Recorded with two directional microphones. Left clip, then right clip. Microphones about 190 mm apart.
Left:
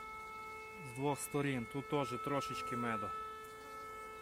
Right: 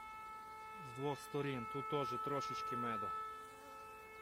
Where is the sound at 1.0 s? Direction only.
15° left (ahead or behind).